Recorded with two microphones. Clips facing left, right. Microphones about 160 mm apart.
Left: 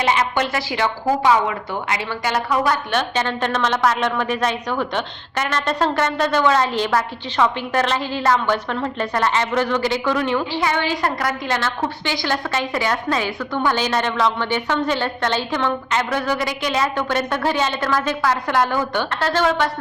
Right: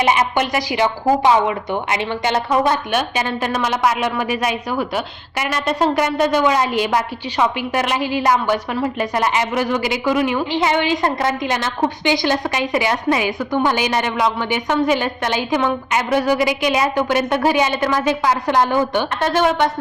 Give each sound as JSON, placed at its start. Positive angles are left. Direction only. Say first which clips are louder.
{"t": 0.0, "sound": "speech", "louder": "right 2 dB", "side_deg": -15}
{"t": 3.0, "sound": "a woman's voice", "louder": "right 1 dB", "side_deg": -10}